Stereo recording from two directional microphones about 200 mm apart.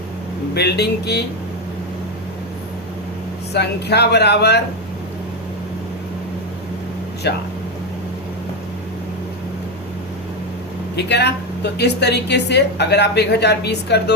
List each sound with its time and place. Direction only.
0.5 s a woman's voice: 55° left (ahead or behind)
3.5 s a woman's voice: 55° left (ahead or behind)
7.2 s a woman's voice: 55° left (ahead or behind)
10.9 s a woman's voice: 55° left (ahead or behind)